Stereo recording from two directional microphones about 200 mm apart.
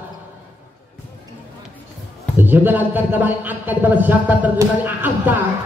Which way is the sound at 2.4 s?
10° right (ahead or behind).